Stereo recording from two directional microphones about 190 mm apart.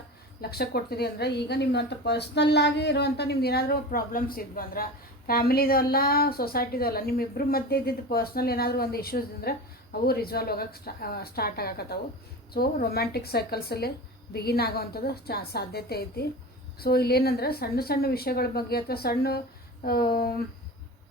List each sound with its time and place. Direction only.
0.5 s a woman's voice: 55° left (ahead or behind)